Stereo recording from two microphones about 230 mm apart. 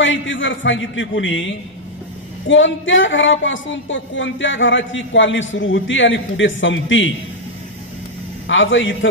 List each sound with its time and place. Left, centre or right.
0.0 s a woman's voice: left
8.5 s a man's voice: left